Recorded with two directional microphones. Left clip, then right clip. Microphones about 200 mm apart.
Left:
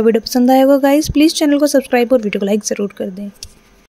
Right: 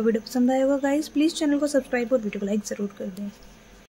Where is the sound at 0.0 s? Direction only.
35° left (ahead or behind).